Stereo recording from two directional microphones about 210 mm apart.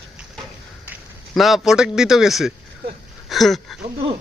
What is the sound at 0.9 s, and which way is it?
A man's voice, centre (ahead or behind).